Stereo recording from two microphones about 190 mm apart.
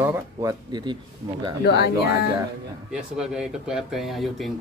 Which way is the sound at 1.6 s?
55° left (ahead or behind).